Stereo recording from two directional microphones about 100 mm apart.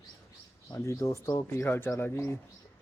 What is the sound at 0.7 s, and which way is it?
Speech, 30° left (ahead or behind).